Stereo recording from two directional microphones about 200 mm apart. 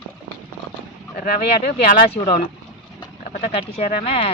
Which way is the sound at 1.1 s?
40° left (ahead or behind).